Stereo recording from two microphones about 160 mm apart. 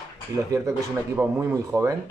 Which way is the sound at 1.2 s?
15° right (ahead or behind).